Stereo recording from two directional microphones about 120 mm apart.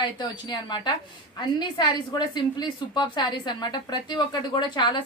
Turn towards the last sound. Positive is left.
turn(degrees=40)  # may be behind; listen again after turning